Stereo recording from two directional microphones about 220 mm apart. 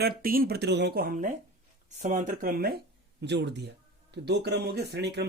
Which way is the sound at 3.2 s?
50° right (ahead or behind).